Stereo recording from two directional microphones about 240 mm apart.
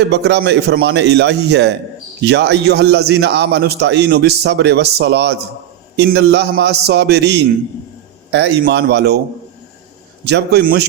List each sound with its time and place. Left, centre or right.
0.1 s a man's voice: right
10.2 s a man's voice: right